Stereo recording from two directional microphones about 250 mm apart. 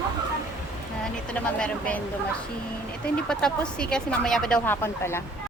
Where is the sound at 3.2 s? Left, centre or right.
Centre.